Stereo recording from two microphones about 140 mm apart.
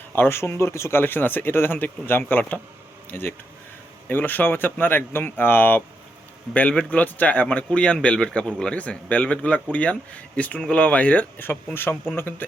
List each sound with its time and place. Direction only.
0.1 s a man's voice: 15° left (ahead or behind)